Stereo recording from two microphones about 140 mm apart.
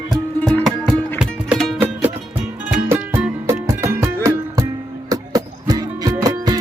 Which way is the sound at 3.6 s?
20° right (ahead or behind).